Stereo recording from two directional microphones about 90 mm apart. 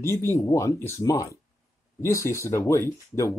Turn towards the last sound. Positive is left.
turn(degrees=30)  # may be behind; listen again after turning